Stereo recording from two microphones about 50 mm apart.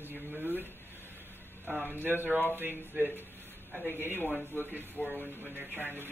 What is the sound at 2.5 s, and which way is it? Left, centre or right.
Speech, right.